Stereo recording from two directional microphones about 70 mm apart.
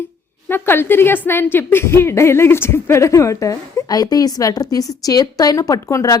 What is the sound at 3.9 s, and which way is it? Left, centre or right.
A woman's voice, left.